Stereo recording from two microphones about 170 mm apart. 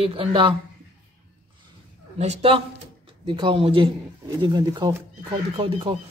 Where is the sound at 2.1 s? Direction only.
35° right (ahead or behind).